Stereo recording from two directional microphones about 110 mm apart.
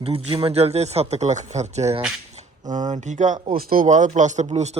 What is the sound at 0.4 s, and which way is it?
Speech, 70° right (ahead or behind).